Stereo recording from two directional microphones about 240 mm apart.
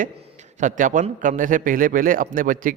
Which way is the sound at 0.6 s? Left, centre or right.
Right.